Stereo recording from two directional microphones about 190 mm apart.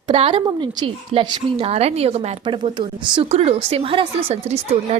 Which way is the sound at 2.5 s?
25° right (ahead or behind).